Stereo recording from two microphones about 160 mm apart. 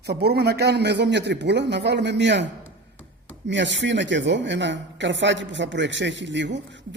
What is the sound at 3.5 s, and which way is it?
Speech, 90° right.